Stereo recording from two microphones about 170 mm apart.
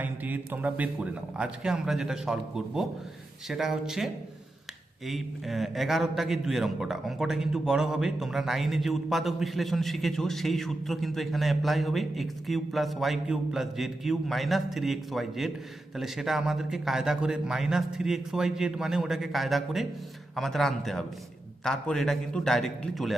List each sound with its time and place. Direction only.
0.0 s a man's voice: 10° right (ahead or behind)